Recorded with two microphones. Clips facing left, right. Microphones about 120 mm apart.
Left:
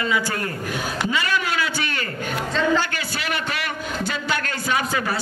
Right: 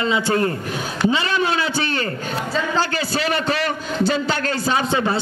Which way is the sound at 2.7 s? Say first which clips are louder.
Right 2 dB; 30° right (ahead or behind).